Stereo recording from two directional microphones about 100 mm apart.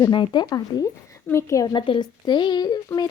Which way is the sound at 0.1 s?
50° left (ahead or behind).